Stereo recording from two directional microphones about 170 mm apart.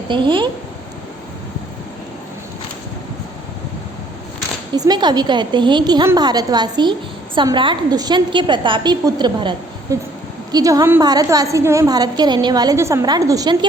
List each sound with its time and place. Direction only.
0.1 s a woman's voice: 30° right (ahead or behind)
4.7 s a woman's voice: 25° right (ahead or behind)